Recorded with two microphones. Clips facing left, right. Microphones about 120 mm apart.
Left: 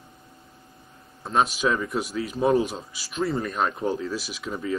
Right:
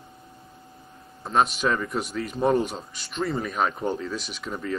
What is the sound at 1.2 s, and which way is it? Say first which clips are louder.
A man's voice: even; centre (ahead or behind).